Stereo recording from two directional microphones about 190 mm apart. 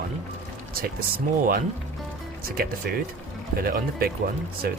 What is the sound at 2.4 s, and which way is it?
Speech, 50° right (ahead or behind).